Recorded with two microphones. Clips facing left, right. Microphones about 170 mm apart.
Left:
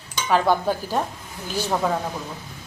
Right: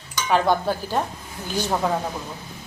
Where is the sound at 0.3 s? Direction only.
5° left (ahead or behind).